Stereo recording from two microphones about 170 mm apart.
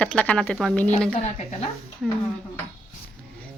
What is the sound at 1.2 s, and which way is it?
Speech, 40° left (ahead or behind).